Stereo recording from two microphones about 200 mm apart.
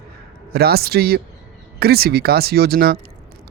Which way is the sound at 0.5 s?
50° right (ahead or behind).